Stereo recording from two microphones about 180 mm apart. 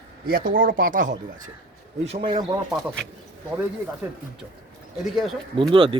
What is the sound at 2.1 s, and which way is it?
Speech, 35° right (ahead or behind).